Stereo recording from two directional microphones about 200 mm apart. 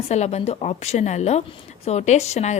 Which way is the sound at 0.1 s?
35° left (ahead or behind).